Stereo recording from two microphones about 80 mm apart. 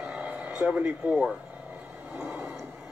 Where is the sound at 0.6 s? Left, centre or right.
Centre.